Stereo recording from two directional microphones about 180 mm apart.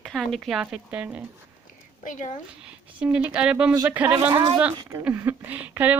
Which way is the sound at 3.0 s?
5° right (ahead or behind).